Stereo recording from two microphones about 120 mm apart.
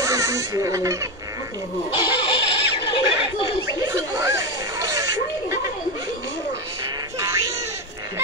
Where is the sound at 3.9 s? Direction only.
25° right (ahead or behind).